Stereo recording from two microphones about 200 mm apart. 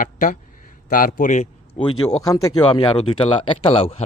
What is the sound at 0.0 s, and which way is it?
A man's voice, 40° left (ahead or behind).